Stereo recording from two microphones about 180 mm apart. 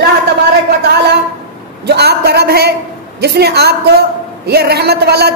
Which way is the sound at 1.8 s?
65° right (ahead or behind).